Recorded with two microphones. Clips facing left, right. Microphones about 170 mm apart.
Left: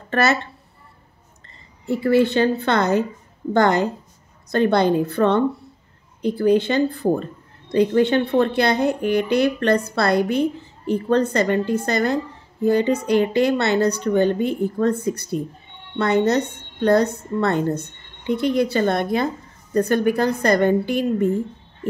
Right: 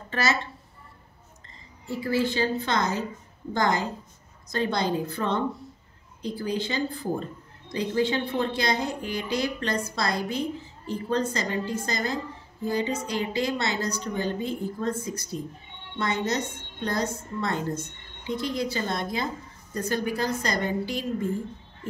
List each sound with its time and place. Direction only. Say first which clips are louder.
0.1 s a woman's voice: left 8 dB; 60° left (ahead or behind)
1.9 s speech: left 9 dB; 65° left (ahead or behind)